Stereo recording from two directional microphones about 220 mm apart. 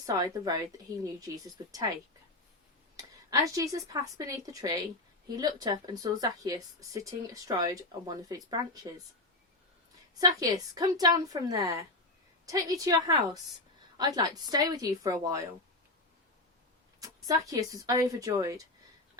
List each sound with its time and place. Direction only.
0.0 s a woman's voice: 15° right (ahead or behind)
10.2 s speech: 15° right (ahead or behind)
17.0 s speech: 15° right (ahead or behind)